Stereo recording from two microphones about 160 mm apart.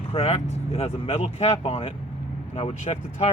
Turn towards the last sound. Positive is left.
turn(degrees=45)  # may be behind; listen again after turning